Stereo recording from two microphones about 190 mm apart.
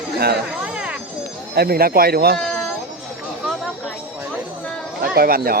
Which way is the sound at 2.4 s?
5° left (ahead or behind).